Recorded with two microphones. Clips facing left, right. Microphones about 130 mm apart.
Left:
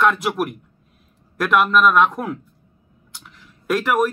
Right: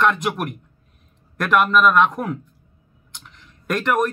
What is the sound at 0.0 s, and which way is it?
A man's voice, centre (ahead or behind).